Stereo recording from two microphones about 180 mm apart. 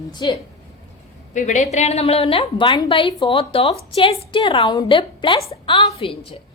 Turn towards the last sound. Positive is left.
turn(degrees=30)  # may be behind; listen again after turning